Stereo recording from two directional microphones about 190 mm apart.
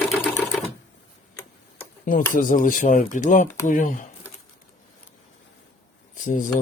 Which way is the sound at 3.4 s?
15° left (ahead or behind).